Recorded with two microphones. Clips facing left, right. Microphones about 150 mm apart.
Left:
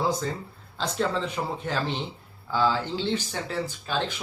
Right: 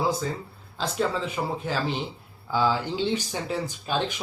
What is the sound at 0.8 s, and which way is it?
Speech, 5° right (ahead or behind).